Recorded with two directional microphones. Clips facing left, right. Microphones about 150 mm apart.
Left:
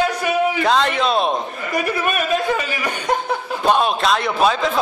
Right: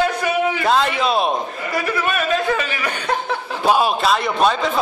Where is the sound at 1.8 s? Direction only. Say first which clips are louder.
Left 1 dB; 15° left (ahead or behind).